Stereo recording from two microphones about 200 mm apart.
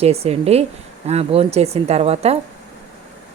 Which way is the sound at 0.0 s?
30° right (ahead or behind).